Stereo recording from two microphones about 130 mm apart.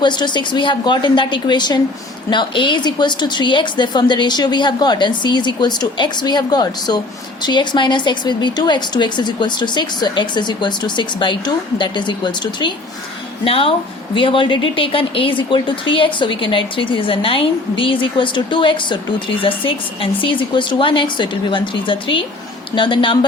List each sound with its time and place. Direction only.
0.0 s speech: 35° left (ahead or behind)
13.4 s speech: 45° left (ahead or behind)